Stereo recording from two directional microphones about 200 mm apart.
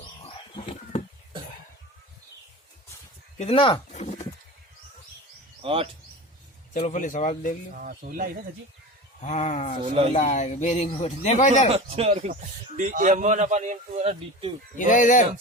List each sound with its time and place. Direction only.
0.2 s a sound: 25° left (ahead or behind)
3.3 s a sound: 30° left (ahead or behind)
5.6 s speech: 25° right (ahead or behind)
6.7 s speech: 40° left (ahead or behind)
7.8 s speech: 50° right (ahead or behind)
9.2 s speech: 35° left (ahead or behind)
11.7 s speech: 30° right (ahead or behind)
14.8 s speech: 40° left (ahead or behind)